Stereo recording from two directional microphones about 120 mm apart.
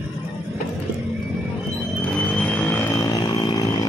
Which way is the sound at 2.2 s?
10° left (ahead or behind).